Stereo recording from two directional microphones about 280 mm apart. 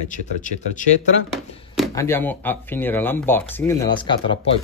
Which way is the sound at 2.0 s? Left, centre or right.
Centre.